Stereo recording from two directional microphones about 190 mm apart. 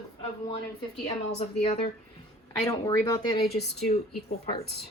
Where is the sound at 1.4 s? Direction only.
35° left (ahead or behind).